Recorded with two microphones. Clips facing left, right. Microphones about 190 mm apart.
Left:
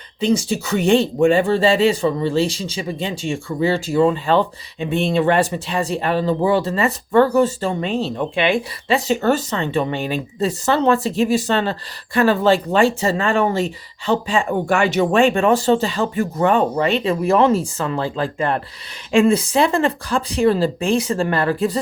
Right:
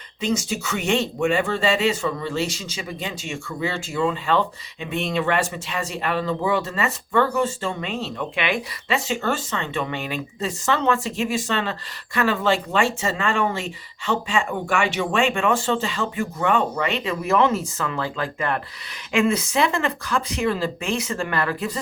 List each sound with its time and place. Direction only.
0.2 s speech: 30° left (ahead or behind)